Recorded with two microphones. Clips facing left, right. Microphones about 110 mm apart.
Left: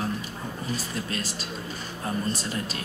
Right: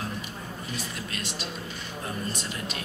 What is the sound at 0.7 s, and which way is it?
Speech, 35° left (ahead or behind).